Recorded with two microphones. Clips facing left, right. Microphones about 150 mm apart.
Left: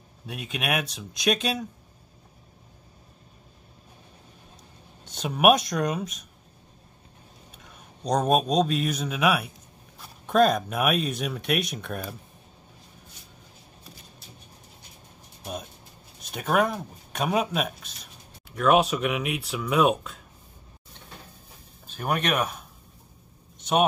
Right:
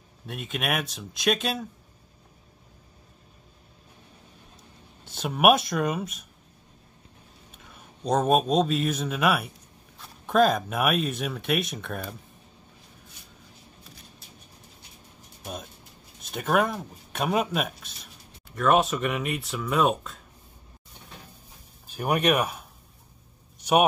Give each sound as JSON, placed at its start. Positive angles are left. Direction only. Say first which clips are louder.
{"t": 0.3, "sound": "speech", "louder": "even", "side_deg": 0}
{"t": 5.0, "sound": "speech", "louder": "even", "side_deg": -5}
{"t": 7.5, "sound": "a man's voice", "louder": "right 2 dB", "side_deg": 0}
{"t": 16.2, "sound": "speech", "louder": "even", "side_deg": 0}
{"t": 21.8, "sound": "speech", "louder": "right 3 dB", "side_deg": -10}